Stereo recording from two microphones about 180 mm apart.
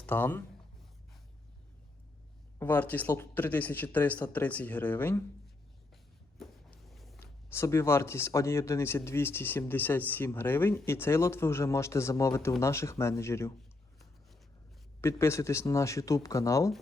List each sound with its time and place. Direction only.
0.0 s speech: 10° left (ahead or behind)
2.6 s speech: 10° left (ahead or behind)
6.4 s a sound: centre (ahead or behind)
7.2 s speech: 15° left (ahead or behind)
15.0 s speech: 15° left (ahead or behind)